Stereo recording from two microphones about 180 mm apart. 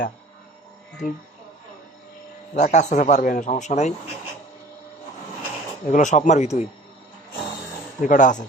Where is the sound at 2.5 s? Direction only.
40° left (ahead or behind).